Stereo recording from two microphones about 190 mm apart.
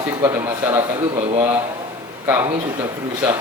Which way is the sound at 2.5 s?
25° right (ahead or behind).